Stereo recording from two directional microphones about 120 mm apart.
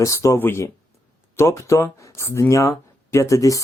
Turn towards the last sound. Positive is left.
turn(degrees=25)  # may be behind; listen again after turning